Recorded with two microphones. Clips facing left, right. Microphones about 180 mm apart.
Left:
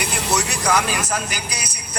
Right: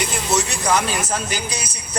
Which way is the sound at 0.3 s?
25° right (ahead or behind).